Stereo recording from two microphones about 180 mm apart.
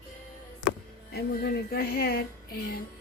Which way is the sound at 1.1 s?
60° left (ahead or behind).